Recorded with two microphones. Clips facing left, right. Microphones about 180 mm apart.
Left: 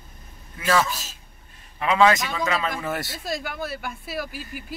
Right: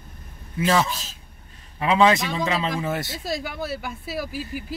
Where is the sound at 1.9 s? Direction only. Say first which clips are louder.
Even; 25° right (ahead or behind).